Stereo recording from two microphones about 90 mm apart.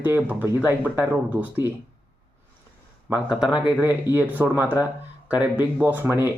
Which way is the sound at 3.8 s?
25° right (ahead or behind).